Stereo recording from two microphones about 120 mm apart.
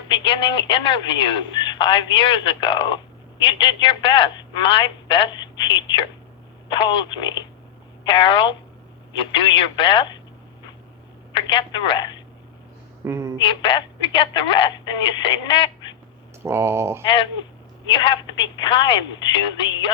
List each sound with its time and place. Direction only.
0.1 s speech: 40° left (ahead or behind)
11.3 s speech: 40° left (ahead or behind)
13.1 s a woman's voice: 20° right (ahead or behind)
13.4 s speech: 45° left (ahead or behind)
16.4 s speech: 20° right (ahead or behind)
17.9 s speech: 45° left (ahead or behind)